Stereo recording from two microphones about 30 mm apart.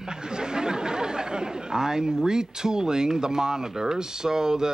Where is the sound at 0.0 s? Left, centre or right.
Right.